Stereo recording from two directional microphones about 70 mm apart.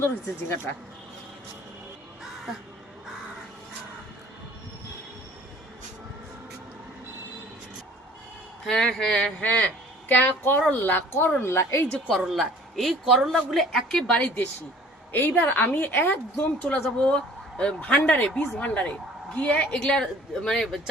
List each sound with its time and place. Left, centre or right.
0.0 s speech: left
8.7 s speech: centre
9.4 s a woman's voice: left
12.1 s speech: centre
14.1 s speech: centre
15.1 s a woman's voice: left
17.0 s a woman's voice: centre